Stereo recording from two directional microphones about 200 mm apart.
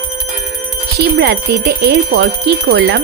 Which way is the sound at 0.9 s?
55° right (ahead or behind).